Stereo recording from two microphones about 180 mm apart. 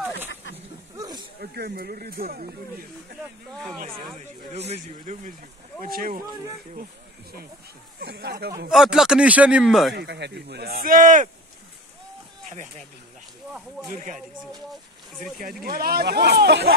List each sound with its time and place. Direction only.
0.9 s snake: 20° right (ahead or behind)
1.4 s speech: 60° right (ahead or behind)
3.8 s speech: 25° right (ahead or behind)
5.8 s speech: 55° right (ahead or behind)
8.0 s speech: 65° right (ahead or behind)
8.6 s speech: 5° right (ahead or behind)
9.9 s speech: 70° right (ahead or behind); by 11.2 s 45° right (ahead or behind)
12.4 s speech: 40° right (ahead or behind)
13.5 s speech: centre (ahead or behind)
13.9 s speech: 45° right (ahead or behind)
14.7 s speech: centre (ahead or behind)
15.6 s speech: 55° right (ahead or behind)